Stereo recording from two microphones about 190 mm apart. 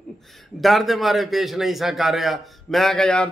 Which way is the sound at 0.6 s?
Centre (ahead or behind).